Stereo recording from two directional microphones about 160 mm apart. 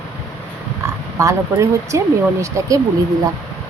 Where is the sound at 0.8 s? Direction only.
20° right (ahead or behind).